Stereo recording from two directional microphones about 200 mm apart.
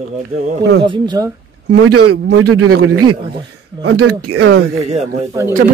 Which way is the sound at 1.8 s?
90° right.